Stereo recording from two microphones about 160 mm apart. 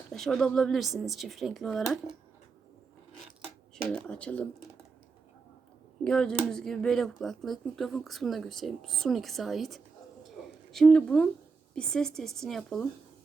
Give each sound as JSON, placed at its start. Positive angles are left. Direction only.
{"t": 0.1, "sound": "speech", "side_deg": 0}
{"t": 3.8, "sound": "speech", "side_deg": 5}
{"t": 6.1, "sound": "speech", "side_deg": 5}